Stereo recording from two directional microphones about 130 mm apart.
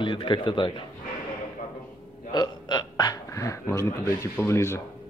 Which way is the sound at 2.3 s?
30° left (ahead or behind).